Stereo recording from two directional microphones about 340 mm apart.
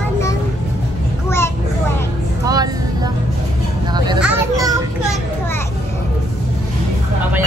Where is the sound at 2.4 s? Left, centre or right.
Centre.